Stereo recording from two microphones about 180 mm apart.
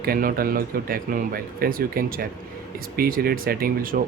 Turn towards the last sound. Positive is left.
turn(degrees=-55)  # may be behind; listen again after turning